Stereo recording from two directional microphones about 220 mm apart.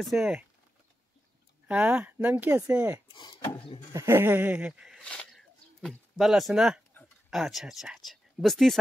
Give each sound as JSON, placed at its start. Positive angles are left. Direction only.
{"t": 0.0, "sound": "speech", "side_deg": 0}
{"t": 1.7, "sound": "speech", "side_deg": -5}
{"t": 3.1, "sound": "speech", "side_deg": 20}
{"t": 3.9, "sound": "speech", "side_deg": -10}